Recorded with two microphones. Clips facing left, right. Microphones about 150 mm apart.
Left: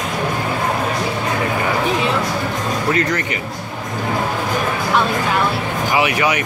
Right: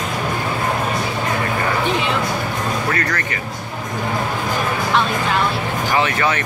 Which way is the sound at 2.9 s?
20° left (ahead or behind).